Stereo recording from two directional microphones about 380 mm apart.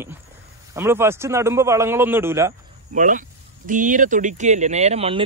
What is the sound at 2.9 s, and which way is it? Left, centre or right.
Speech, centre.